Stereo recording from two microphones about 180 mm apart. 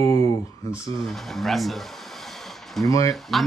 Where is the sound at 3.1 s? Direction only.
Centre (ahead or behind).